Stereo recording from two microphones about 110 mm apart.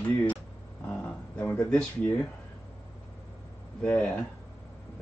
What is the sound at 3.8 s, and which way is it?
Speech, 10° left (ahead or behind).